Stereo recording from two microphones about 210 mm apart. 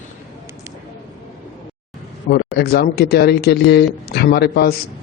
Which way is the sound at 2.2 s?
45° left (ahead or behind).